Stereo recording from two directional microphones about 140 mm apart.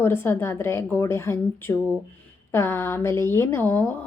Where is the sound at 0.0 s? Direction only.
15° left (ahead or behind).